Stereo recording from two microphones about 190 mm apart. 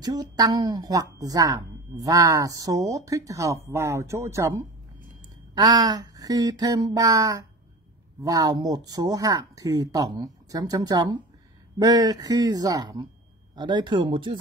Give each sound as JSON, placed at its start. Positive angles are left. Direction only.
{"t": 0.0, "sound": "a woman's voice", "side_deg": -20}
{"t": 5.2, "sound": "a sound", "side_deg": -20}
{"t": 8.2, "sound": "speech", "side_deg": -20}